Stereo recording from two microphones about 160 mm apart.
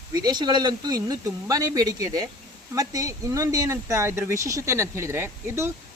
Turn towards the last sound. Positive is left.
turn(degrees=-15)  # may be behind; listen again after turning